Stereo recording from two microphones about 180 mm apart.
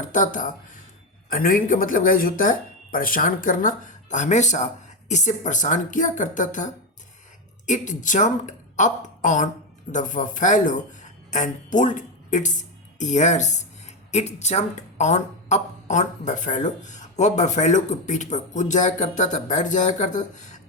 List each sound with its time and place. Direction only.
0.1 s speech: 45° left (ahead or behind)
7.7 s speech: 45° left (ahead or behind)